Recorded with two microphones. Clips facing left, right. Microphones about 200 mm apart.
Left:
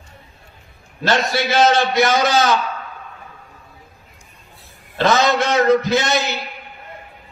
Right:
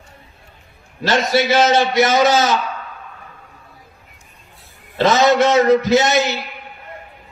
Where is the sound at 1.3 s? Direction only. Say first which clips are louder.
Right 3 dB; 20° right (ahead or behind).